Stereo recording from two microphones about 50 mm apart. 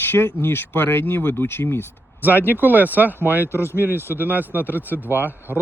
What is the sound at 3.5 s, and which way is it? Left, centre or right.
Speech, right.